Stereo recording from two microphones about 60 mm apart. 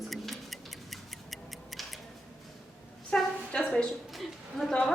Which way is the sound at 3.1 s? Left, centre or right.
Centre.